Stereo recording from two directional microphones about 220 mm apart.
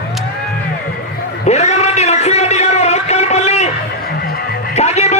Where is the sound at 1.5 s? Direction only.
30° left (ahead or behind).